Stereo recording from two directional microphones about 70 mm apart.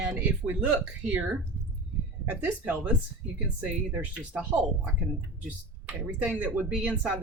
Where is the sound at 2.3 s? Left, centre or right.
Right.